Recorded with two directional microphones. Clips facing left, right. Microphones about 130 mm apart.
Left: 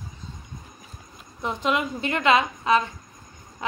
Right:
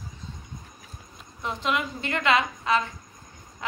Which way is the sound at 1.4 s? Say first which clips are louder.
Left 3 dB; 20° left (ahead or behind).